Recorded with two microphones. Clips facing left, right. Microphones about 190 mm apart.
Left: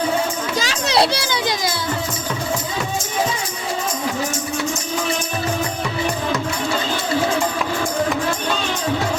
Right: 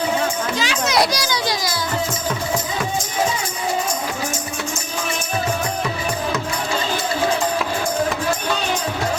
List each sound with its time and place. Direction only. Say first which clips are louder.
0.6 s a child's voice: left 1 dB; 35° left (ahead or behind)